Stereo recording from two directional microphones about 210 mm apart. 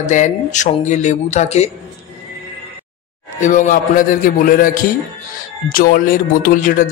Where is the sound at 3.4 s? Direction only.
35° left (ahead or behind).